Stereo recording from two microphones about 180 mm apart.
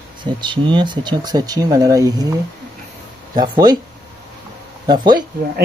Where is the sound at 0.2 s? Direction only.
25° right (ahead or behind).